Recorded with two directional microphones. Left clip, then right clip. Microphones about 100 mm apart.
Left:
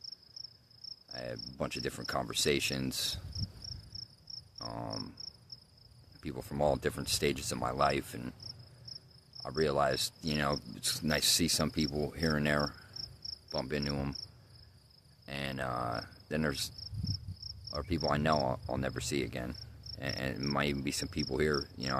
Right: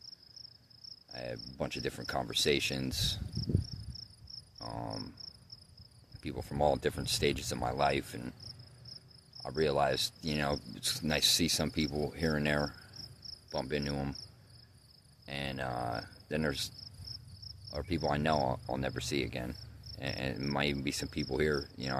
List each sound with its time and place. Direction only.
1.1 s insect: 20° left (ahead or behind)
1.5 s speech: 25° left (ahead or behind)
3.3 s cricket: 50° right (ahead or behind)
4.9 s cricket: 35° left (ahead or behind)
6.2 s speech: 25° left (ahead or behind)
9.5 s speech: 25° left (ahead or behind)
15.3 s cricket: 20° left (ahead or behind)
15.8 s speech: 25° left (ahead or behind)